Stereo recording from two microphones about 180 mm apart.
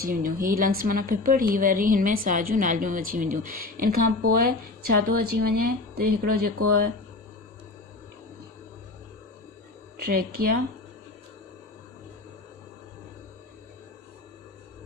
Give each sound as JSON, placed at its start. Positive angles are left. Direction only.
{"t": 0.0, "sound": "a woman's voice", "side_deg": -50}
{"t": 9.9, "sound": "speech", "side_deg": -60}